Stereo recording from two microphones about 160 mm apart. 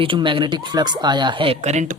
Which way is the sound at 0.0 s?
30° right (ahead or behind).